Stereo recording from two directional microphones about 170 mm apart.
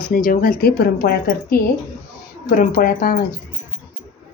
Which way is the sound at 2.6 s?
55° left (ahead or behind).